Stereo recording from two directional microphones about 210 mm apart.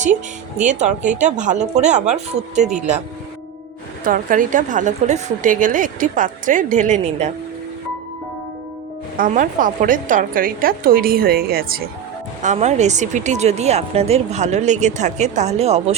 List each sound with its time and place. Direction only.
0.6 s speech: 35° right (ahead or behind)
4.0 s speech: 40° right (ahead or behind)
9.1 s a woman's voice: 40° right (ahead or behind)
12.4 s speech: 35° right (ahead or behind)